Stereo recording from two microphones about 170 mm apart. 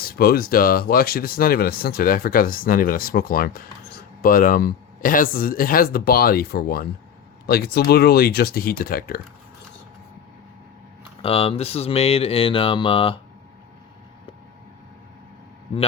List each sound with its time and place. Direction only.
0.0 s speech: 60° left (ahead or behind)
11.2 s speech: 35° left (ahead or behind)